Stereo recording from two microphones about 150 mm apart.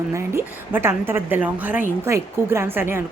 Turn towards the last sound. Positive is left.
turn(degrees=-15)  # may be behind; listen again after turning